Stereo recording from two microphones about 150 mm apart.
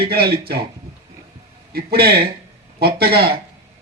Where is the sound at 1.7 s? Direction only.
90° right.